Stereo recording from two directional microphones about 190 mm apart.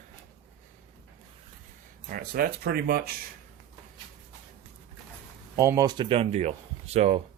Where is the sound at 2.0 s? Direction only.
50° right (ahead or behind).